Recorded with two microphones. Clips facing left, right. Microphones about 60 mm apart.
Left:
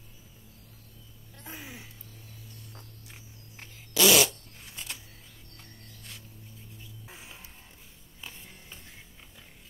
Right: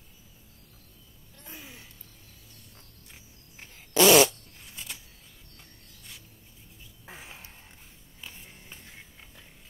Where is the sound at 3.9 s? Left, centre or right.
Right.